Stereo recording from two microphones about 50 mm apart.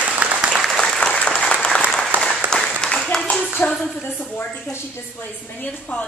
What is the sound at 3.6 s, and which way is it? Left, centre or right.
Speech, left.